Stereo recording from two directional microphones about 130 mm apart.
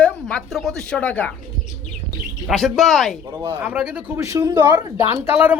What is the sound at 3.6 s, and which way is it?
Speech, 10° right (ahead or behind).